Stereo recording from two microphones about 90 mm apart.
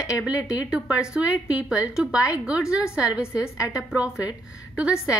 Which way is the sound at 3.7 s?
10° right (ahead or behind).